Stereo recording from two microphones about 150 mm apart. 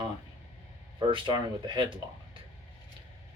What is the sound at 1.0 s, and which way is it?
Speech, 35° right (ahead or behind).